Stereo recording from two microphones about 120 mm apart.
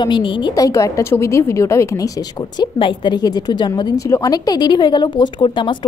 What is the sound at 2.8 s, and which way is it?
Speech, 40° left (ahead or behind).